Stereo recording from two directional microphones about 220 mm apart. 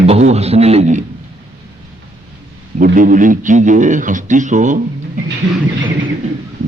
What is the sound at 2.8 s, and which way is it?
A man's voice, 35° right (ahead or behind).